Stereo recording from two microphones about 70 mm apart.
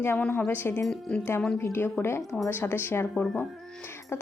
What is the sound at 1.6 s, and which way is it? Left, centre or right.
A woman's voice, left.